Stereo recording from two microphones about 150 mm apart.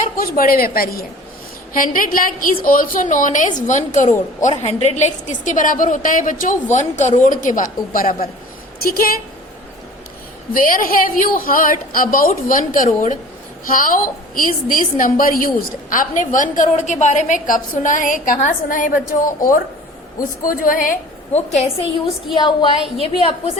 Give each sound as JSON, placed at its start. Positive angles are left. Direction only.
{"t": 0.0, "sound": "a woman's voice", "side_deg": 75}
{"t": 1.7, "sound": "a woman's voice", "side_deg": 65}
{"t": 8.8, "sound": "a woman's voice", "side_deg": 80}
{"t": 10.6, "sound": "a woman's voice", "side_deg": 70}
{"t": 20.4, "sound": "a woman's voice", "side_deg": 65}
{"t": 22.4, "sound": "a woman's voice", "side_deg": 35}